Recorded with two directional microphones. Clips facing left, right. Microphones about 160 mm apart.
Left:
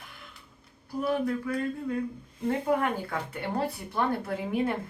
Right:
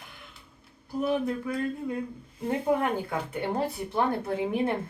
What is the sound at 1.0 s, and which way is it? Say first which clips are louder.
Speech: even; 20° right (ahead or behind).